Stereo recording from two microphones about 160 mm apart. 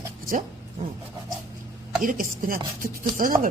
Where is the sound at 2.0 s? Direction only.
60° right (ahead or behind).